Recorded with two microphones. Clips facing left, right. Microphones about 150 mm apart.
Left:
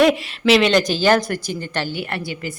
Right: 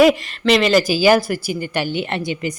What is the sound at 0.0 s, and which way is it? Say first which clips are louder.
A woman's voice: right 2 dB; centre (ahead or behind).